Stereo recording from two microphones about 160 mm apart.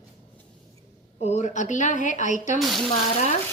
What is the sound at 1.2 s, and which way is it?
A woman's voice, 45° left (ahead or behind).